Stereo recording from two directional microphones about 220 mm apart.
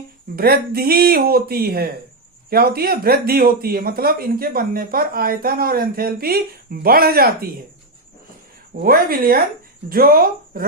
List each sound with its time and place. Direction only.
0.3 s speech: 45° right (ahead or behind)
8.8 s speech: 40° right (ahead or behind)